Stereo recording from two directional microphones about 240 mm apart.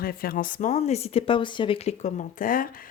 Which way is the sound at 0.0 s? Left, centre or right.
Left.